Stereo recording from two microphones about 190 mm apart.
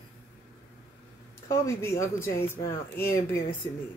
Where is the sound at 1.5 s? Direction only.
15° left (ahead or behind).